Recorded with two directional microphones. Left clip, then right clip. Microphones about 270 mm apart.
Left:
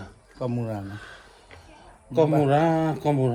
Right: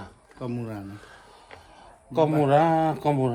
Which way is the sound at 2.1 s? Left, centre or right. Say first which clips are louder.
Even; centre.